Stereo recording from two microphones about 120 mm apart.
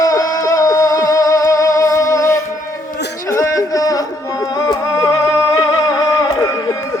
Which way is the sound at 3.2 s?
25° left (ahead or behind).